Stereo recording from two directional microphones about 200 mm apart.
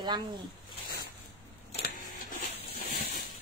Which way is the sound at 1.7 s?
45° left (ahead or behind).